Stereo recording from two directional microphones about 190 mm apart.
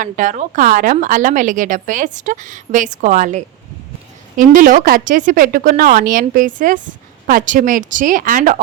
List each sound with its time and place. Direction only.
0.0 s a woman's voice: 40° right (ahead or behind)